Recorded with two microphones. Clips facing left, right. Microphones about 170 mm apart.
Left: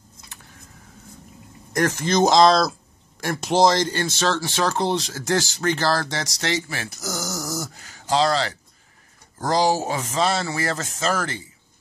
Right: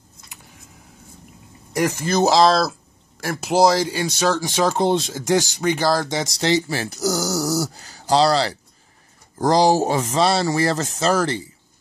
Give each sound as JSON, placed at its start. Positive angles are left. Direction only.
{"t": 1.7, "sound": "a man's voice", "side_deg": -10}